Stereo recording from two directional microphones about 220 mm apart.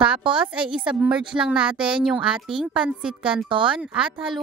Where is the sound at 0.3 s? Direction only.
5° right (ahead or behind).